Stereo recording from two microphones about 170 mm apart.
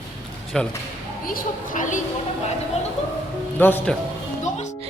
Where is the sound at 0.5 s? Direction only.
5° left (ahead or behind).